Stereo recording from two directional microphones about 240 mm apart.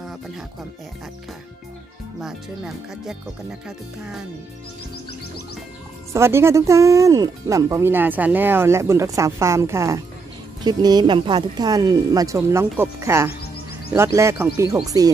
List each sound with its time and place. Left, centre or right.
2.1 s speech: centre
6.1 s speech: centre